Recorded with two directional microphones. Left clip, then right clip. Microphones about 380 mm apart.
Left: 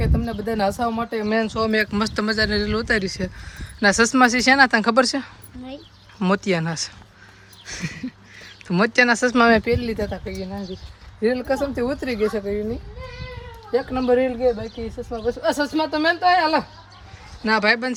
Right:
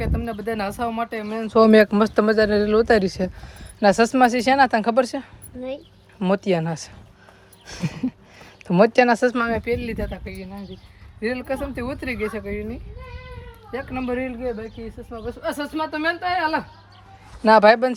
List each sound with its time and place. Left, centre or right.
0.0 s speech: centre
1.5 s speech: centre
9.5 s speech: centre
13.7 s speech: centre
17.4 s speech: centre